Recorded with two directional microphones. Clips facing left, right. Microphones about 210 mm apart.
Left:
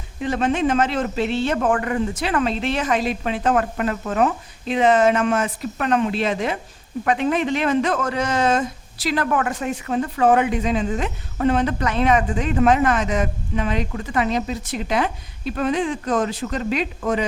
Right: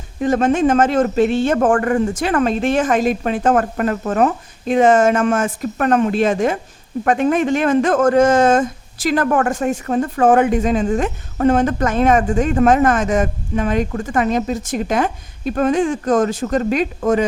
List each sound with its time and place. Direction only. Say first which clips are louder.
0.2 s speech: right 5 dB; 45° right (ahead or behind)